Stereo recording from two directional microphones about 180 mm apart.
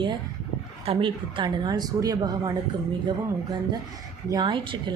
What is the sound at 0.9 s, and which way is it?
Speech, 30° right (ahead or behind).